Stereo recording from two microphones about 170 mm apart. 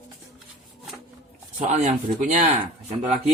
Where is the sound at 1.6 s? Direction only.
40° right (ahead or behind).